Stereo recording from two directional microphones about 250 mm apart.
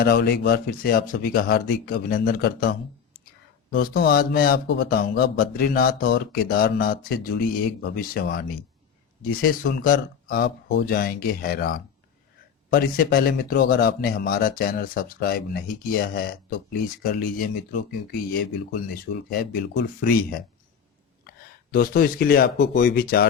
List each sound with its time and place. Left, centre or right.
0.0 s speech: left
3.8 s speech: left
19.3 s speech: left
21.2 s speech: left